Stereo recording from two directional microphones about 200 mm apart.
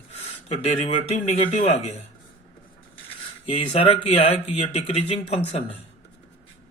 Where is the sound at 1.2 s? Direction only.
35° left (ahead or behind).